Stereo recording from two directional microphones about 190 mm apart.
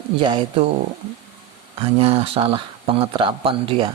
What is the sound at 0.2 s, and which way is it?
Speech, 25° right (ahead or behind).